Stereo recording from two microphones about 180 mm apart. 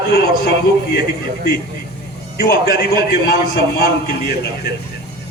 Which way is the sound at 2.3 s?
60° left (ahead or behind).